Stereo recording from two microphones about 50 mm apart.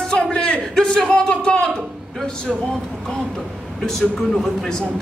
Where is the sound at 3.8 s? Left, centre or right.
Centre.